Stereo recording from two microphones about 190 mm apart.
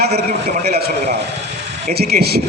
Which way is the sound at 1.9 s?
55° right (ahead or behind).